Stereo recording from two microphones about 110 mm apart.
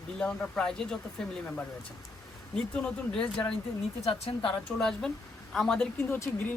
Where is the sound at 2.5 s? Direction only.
10° left (ahead or behind).